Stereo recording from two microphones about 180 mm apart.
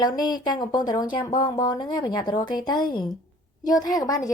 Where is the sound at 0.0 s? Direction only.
25° left (ahead or behind).